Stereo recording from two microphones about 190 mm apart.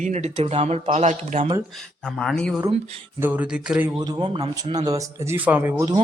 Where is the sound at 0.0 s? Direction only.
35° right (ahead or behind).